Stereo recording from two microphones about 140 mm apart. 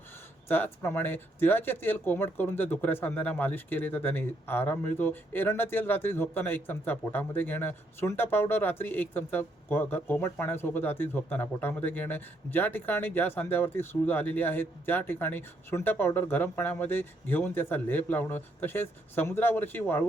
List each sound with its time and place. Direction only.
0.4 s speech: 15° left (ahead or behind)